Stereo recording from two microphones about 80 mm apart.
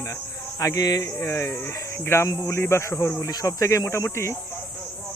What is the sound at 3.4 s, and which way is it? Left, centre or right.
Speech, left.